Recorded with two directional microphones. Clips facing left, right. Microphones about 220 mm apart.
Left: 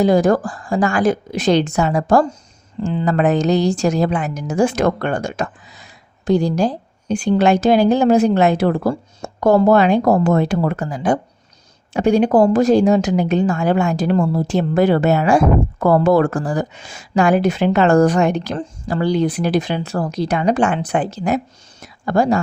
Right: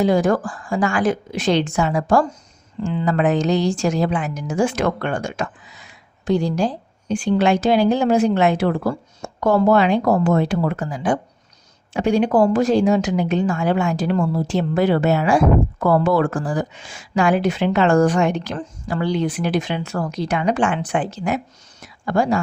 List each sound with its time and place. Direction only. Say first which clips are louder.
0.0 s a woman's voice: left 3 dB; 40° left (ahead or behind)